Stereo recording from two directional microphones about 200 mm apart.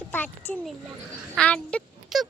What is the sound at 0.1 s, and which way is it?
A child's voice, 10° left (ahead or behind).